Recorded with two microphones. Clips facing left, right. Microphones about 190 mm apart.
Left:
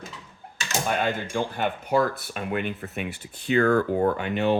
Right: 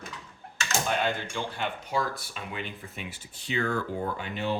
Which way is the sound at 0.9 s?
50° left (ahead or behind).